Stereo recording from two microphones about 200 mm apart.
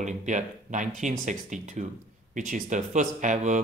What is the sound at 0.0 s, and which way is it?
Speech, 40° right (ahead or behind).